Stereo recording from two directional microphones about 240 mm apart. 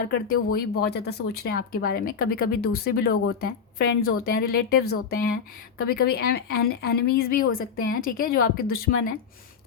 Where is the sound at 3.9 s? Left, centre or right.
Left.